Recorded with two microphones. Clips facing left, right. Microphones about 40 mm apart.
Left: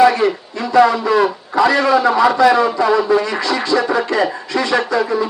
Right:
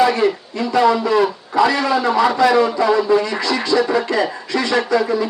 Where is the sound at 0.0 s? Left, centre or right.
Left.